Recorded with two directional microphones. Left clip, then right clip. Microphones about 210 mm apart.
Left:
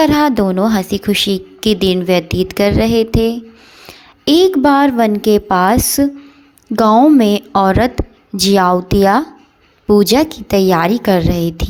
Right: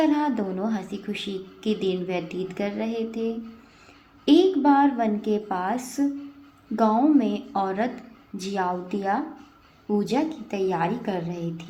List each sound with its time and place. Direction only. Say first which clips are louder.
0.0 s a woman's voice: left 12 dB; 35° left (ahead or behind)